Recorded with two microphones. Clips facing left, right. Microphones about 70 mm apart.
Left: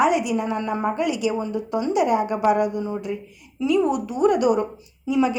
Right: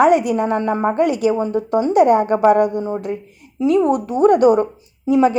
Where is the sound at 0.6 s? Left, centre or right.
Right.